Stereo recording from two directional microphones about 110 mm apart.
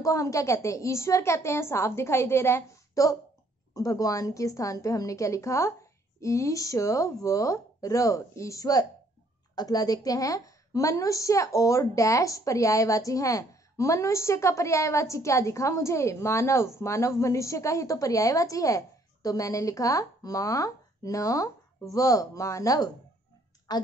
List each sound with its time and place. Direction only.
0.0 s a woman's voice: 30° left (ahead or behind)